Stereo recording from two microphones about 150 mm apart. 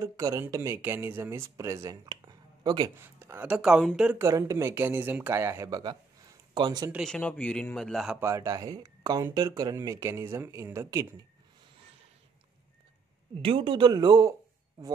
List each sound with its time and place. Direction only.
0.0 s speech: 20° right (ahead or behind)
3.0 s speech: 15° right (ahead or behind)
4.3 s speech: 20° right (ahead or behind)
6.9 s speech: centre (ahead or behind)
8.2 s speech: 20° right (ahead or behind)
13.4 s speech: 35° right (ahead or behind)